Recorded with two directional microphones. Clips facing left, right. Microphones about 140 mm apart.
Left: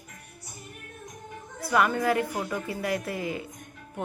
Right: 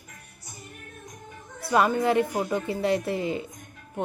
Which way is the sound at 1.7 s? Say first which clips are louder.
Right 2 dB; 25° right (ahead or behind).